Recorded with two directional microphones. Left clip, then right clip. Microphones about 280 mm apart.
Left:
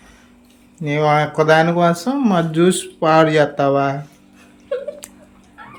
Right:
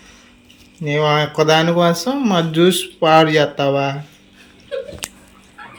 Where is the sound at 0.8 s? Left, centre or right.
Centre.